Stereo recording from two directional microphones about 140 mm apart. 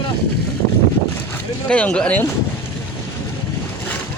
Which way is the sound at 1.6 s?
10° left (ahead or behind).